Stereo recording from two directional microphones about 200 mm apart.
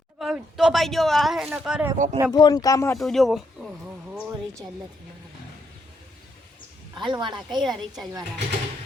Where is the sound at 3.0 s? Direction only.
Centre (ahead or behind).